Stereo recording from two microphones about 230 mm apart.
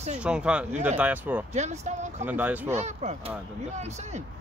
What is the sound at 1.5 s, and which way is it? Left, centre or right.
Speech, right.